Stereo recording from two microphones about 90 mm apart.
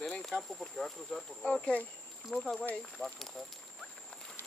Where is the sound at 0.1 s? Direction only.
5° left (ahead or behind).